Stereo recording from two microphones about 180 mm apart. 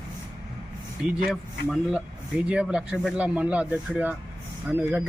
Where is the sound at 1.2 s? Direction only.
5° right (ahead or behind).